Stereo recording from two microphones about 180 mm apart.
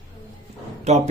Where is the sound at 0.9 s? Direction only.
40° right (ahead or behind).